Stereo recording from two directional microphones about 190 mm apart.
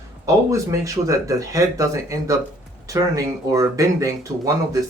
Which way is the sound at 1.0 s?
15° right (ahead or behind).